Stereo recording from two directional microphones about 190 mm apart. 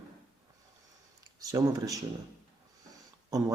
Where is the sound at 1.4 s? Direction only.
20° right (ahead or behind).